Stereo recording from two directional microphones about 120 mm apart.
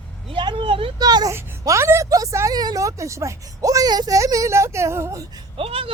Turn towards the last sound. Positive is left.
turn(degrees=-50)  # may be behind; listen again after turning